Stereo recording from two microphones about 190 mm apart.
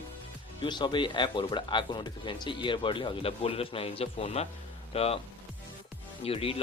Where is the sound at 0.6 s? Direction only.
25° left (ahead or behind).